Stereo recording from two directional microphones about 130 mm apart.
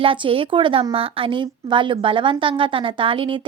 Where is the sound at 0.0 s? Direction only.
40° right (ahead or behind).